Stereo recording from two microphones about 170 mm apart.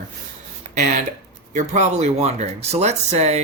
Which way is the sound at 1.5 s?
45° right (ahead or behind).